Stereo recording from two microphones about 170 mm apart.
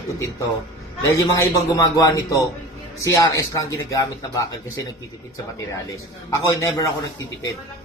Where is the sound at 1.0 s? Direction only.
15° left (ahead or behind).